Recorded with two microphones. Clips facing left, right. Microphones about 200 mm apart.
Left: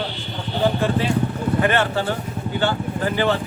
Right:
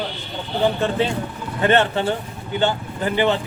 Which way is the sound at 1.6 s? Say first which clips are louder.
Right 4 dB; 25° right (ahead or behind).